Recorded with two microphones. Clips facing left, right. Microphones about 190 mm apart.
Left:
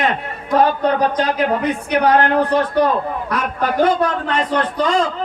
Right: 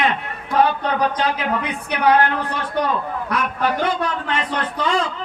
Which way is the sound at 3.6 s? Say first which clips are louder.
Left 6 dB; 40° left (ahead or behind).